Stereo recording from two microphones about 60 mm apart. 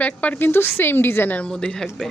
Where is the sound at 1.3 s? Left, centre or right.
Centre.